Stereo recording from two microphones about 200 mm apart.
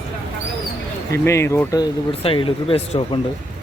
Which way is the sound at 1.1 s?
15° left (ahead or behind).